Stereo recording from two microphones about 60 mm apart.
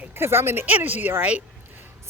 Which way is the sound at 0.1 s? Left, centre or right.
Right.